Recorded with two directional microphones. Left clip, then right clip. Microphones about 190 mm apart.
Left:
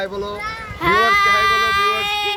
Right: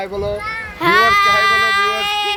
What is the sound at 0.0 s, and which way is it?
Speech, 25° right (ahead or behind).